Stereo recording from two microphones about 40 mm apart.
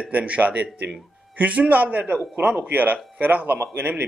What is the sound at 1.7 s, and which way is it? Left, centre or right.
A man's voice, right.